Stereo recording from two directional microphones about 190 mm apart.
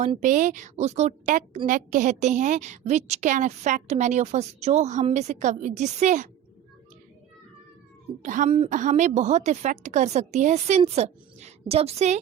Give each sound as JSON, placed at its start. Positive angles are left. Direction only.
{"t": 0.0, "sound": "a woman's voice", "side_deg": -40}
{"t": 8.2, "sound": "a woman's voice", "side_deg": -40}